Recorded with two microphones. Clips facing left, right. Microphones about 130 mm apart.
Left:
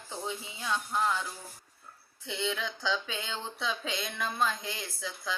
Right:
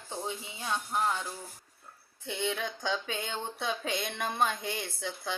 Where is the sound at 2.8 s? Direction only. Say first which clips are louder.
Even; 50° right (ahead or behind).